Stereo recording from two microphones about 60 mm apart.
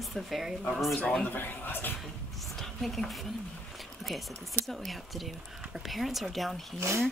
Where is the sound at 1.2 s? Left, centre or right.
Left.